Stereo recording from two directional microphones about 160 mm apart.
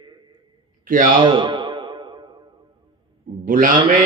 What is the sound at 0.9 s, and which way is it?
Speech, 55° right (ahead or behind).